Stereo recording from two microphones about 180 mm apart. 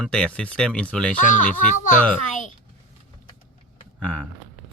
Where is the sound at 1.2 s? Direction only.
45° left (ahead or behind).